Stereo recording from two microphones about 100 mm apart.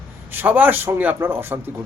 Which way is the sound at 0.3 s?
20° right (ahead or behind).